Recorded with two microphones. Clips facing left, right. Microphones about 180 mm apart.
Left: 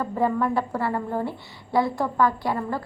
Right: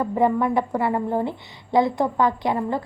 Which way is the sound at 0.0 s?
15° right (ahead or behind).